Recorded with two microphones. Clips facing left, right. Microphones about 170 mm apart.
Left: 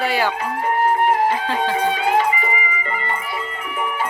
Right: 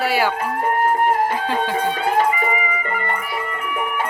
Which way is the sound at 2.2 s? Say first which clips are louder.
Right 2 dB; 50° right (ahead or behind).